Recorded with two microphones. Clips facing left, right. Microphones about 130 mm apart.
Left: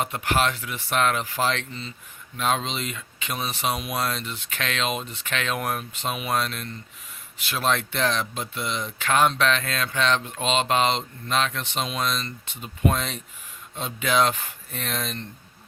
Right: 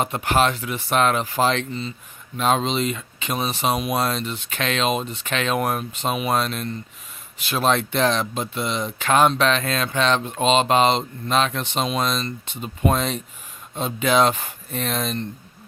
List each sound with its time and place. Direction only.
0.0 s speech: 30° right (ahead or behind)